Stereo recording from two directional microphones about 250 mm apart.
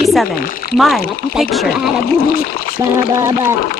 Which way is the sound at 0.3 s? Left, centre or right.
Left.